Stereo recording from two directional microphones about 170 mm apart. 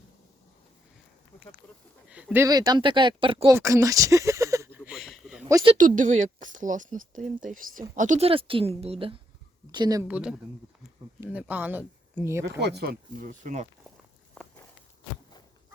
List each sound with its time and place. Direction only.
2.0 s speech: 5° right (ahead or behind)
2.5 s speech: 25° right (ahead or behind)
3.5 s speech: 20° right (ahead or behind)
4.9 s a sound: centre (ahead or behind)
5.7 s speech: 50° right (ahead or behind)
8.3 s a woman's voice: 30° right (ahead or behind)
10.1 s speech: 5° right (ahead or behind)
12.5 s speech: 80° right; by 13.7 s 45° right (ahead or behind)